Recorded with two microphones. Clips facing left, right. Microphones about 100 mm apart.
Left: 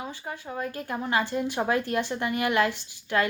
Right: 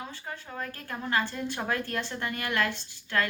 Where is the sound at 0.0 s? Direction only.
15° left (ahead or behind).